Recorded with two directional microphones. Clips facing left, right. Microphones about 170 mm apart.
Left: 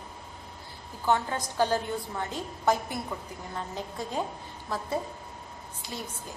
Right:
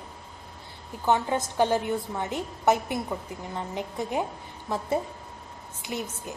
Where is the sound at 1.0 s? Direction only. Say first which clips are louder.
Right 3 dB; 20° right (ahead or behind).